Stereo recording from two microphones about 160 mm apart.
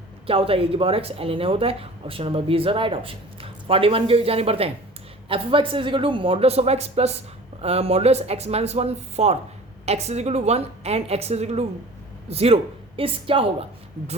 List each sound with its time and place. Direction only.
0.3 s speech: 35° right (ahead or behind)